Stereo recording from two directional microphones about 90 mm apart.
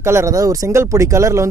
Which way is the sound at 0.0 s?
30° right (ahead or behind).